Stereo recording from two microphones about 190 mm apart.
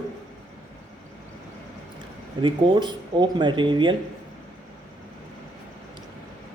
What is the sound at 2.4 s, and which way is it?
Speech, 25° right (ahead or behind).